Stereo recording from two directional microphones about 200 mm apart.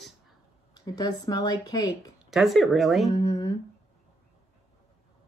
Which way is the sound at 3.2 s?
20° left (ahead or behind).